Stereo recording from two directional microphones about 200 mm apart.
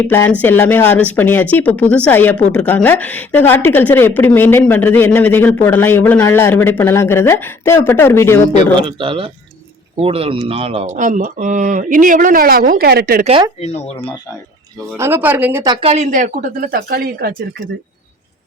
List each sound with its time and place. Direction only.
0.1 s a man's voice: 10° left (ahead or behind)
8.7 s speech: 25° right (ahead or behind); by 13.2 s 50° right (ahead or behind)
13.6 s speech: 35° left (ahead or behind)
14.9 s speech: 10° right (ahead or behind)
15.6 s speech: 25° right (ahead or behind); by 17.4 s 50° right (ahead or behind)